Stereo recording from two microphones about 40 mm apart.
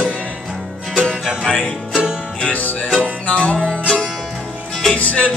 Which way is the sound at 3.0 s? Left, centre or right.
Left.